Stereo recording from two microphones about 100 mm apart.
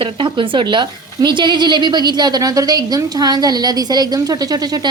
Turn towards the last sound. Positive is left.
turn(degrees=-40)  # may be behind; listen again after turning